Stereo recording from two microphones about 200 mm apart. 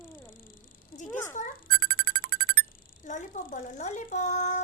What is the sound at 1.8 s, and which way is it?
Music, 40° right (ahead or behind).